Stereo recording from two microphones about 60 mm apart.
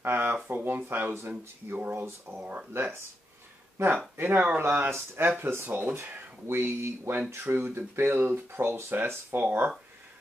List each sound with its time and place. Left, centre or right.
0.0 s speech: right
2.3 s speech: right
2.7 s speech: right
4.2 s speech: right
8.1 s speech: right
9.4 s speech: right